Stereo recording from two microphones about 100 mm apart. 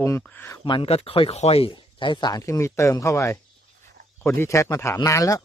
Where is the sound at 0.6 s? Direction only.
55° left (ahead or behind).